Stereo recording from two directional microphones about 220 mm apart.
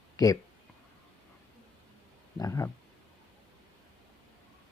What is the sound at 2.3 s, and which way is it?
Speech, 15° left (ahead or behind).